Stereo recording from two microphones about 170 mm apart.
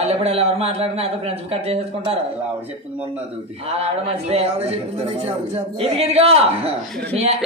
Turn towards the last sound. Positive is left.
turn(degrees=-35)  # may be behind; listen again after turning